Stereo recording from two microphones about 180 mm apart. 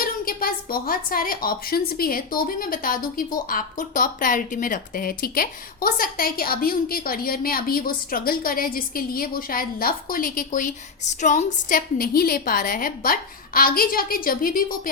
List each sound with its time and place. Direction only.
0.0 s a woman's voice: 55° left (ahead or behind)